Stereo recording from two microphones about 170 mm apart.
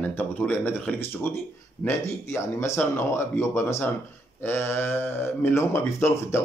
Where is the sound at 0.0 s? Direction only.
10° left (ahead or behind).